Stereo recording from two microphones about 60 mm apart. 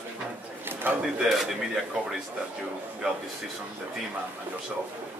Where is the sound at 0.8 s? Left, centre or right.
Right.